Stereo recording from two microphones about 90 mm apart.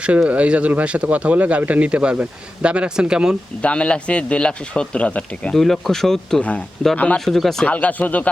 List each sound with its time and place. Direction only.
0.0 s speech: 15° right (ahead or behind)
3.6 s a man's voice: 15° left (ahead or behind)
5.5 s speech: 5° left (ahead or behind)
6.9 s a man's voice: 15° left (ahead or behind)
7.3 s speech: centre (ahead or behind)
7.7 s a man's voice: 15° left (ahead or behind)